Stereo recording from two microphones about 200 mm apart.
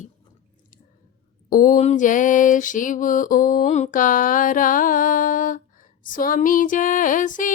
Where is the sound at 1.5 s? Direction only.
45° left (ahead or behind).